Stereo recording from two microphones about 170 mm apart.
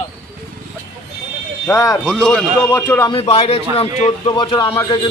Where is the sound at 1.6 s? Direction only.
20° left (ahead or behind).